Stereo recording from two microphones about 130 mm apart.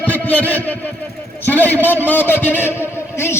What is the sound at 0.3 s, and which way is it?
A man's voice, 10° left (ahead or behind).